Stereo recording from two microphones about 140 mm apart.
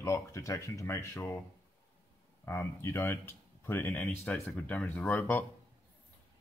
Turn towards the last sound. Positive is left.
turn(degrees=15)  # may be behind; listen again after turning